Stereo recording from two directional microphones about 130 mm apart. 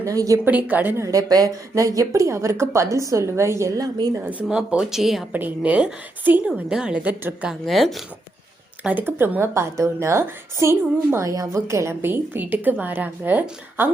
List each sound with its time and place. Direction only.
0.0 s speech: 25° right (ahead or behind)
0.4 s a woman's voice: 10° right (ahead or behind)
1.0 s speech: 25° right (ahead or behind)
4.3 s speech: 10° right (ahead or behind)
5.3 s a woman's voice: 15° right (ahead or behind)
7.6 s speech: centre (ahead or behind)
8.8 s a woman's voice: 10° right (ahead or behind)